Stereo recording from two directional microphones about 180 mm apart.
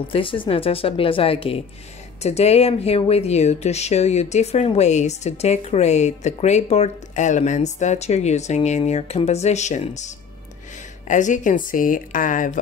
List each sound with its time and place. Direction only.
0.1 s speech: 30° left (ahead or behind); by 12.5 s 45° left (ahead or behind)